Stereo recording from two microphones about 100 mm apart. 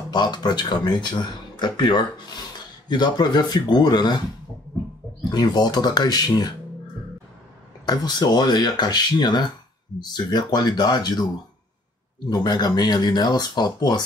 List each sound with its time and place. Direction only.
0.1 s speech: 45° left (ahead or behind)
5.3 s speech: 45° left (ahead or behind)
7.8 s speech: 45° left (ahead or behind)
12.3 s speech: 45° left (ahead or behind)